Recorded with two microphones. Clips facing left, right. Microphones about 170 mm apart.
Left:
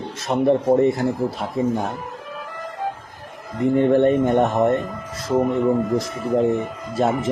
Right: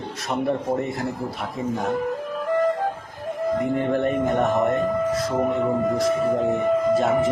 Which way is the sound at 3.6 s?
30° left (ahead or behind).